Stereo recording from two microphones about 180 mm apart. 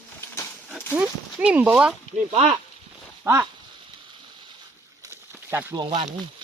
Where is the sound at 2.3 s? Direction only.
30° right (ahead or behind).